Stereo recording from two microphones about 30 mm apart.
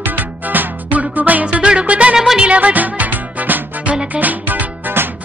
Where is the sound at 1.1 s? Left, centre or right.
Right.